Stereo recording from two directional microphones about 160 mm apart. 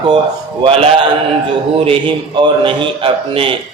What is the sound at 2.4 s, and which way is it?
A man's voice, 30° right (ahead or behind).